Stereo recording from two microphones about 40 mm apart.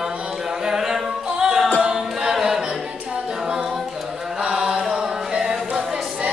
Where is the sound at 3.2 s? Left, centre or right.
Centre.